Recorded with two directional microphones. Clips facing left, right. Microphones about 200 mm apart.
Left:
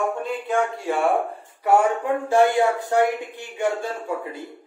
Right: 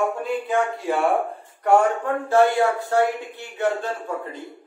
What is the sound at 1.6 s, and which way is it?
A man's voice, 10° left (ahead or behind).